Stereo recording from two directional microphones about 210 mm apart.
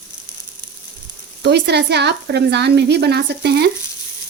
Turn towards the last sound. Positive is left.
turn(degrees=-50)  # may be behind; listen again after turning